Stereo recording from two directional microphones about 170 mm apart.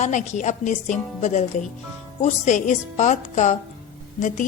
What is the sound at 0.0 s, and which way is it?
A woman's voice, 45° left (ahead or behind).